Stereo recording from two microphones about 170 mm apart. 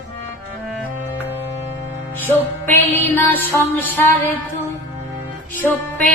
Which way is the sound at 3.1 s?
10° left (ahead or behind).